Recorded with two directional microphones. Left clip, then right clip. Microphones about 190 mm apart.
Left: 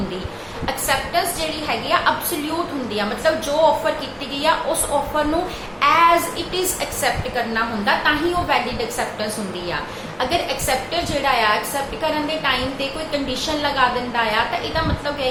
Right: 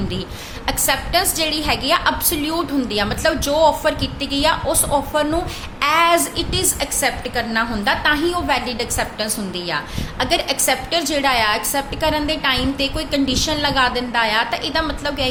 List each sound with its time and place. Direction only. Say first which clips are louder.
0.9 s a woman's voice: right 1 dB; 55° right (ahead or behind)
10.2 s a woman's voice: right 2 dB; 50° right (ahead or behind)